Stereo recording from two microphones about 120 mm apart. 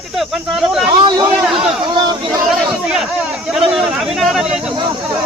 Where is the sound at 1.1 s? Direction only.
30° right (ahead or behind).